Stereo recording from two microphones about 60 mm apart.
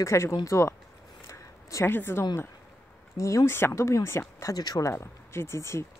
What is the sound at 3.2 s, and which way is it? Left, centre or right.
Speech, left.